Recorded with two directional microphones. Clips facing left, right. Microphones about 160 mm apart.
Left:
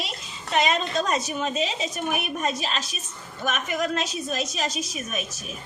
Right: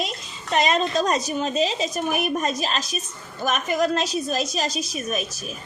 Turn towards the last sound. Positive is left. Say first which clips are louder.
# right 4 dB
turn(degrees=-35)  # may be behind; listen again after turning